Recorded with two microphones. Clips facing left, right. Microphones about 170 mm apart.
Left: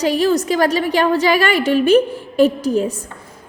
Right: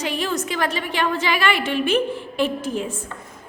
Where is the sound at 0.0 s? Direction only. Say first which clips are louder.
Left 9 dB; 35° left (ahead or behind).